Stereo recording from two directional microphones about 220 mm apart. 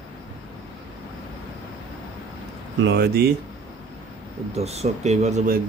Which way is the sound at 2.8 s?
50° right (ahead or behind).